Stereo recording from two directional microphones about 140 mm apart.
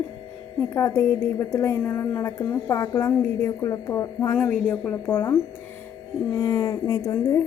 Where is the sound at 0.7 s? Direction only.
20° left (ahead or behind).